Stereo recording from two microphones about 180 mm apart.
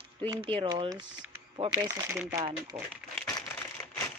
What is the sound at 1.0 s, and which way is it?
Speech, 90° right.